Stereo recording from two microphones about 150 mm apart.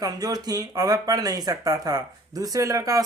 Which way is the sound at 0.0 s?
25° right (ahead or behind).